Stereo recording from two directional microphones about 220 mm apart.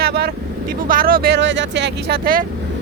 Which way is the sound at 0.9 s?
40° right (ahead or behind).